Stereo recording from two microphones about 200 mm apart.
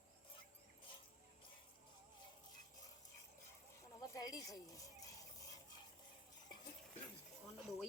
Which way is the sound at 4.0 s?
20° left (ahead or behind).